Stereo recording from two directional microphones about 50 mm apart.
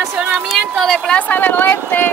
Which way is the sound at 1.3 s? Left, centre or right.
Left.